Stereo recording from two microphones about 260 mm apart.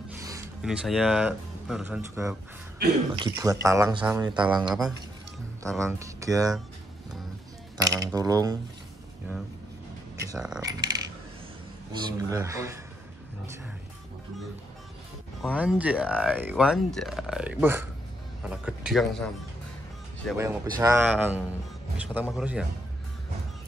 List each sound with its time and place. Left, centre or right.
0.1 s rub: centre
0.7 s speech: centre
4.6 s speech: centre
7.7 s a sound: centre
10.2 s speech: centre
15.4 s speech: centre
20.3 s speech: centre